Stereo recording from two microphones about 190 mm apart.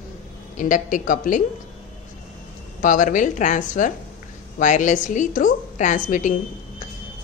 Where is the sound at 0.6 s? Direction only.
40° left (ahead or behind).